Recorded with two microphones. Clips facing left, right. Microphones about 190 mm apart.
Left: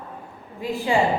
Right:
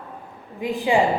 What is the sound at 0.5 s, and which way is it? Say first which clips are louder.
Speech: right 2 dB; 15° right (ahead or behind).